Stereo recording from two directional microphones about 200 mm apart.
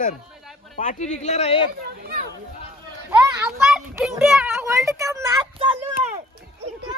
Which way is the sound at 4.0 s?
5° right (ahead or behind).